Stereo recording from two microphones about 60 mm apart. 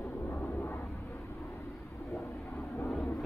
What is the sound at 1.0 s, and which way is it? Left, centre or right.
Vehicle, left.